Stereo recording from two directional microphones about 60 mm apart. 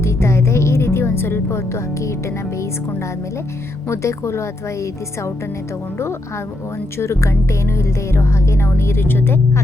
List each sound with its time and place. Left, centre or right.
0.0 s music: left
3.8 s speech: left
7.0 s speech: left